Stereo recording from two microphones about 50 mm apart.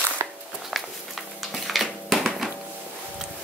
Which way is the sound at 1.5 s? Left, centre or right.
Centre.